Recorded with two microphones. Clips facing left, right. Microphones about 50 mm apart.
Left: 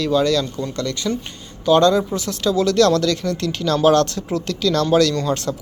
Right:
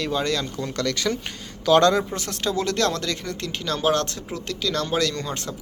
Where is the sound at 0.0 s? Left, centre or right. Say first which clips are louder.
Left 7 dB; right.